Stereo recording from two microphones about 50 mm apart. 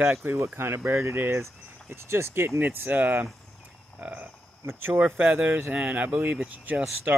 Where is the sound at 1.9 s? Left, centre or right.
Right.